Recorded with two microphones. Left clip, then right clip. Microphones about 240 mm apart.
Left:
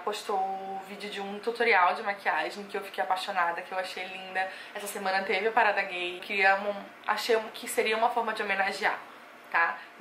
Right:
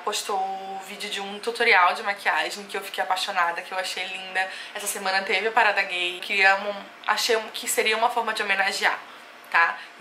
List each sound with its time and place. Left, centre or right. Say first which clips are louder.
0.3 s a woman's voice: right 2 dB; centre
1.0 s a woman's voice: right 4 dB; centre